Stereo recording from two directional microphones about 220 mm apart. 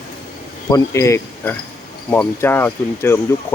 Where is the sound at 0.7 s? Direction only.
15° left (ahead or behind).